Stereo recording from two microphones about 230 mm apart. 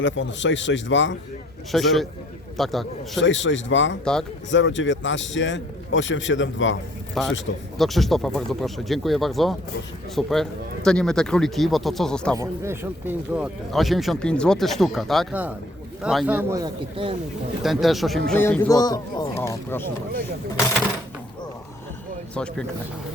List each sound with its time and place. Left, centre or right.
0.0 s a man's voice: left
1.7 s speech: centre
3.2 s a man's voice: left
4.0 s speech: centre
4.5 s a man's voice: left
7.2 s speech: centre
12.3 s a man's voice: centre
17.6 s speech: centre